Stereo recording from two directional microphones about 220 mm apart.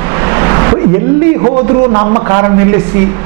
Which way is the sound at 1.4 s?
20° right (ahead or behind).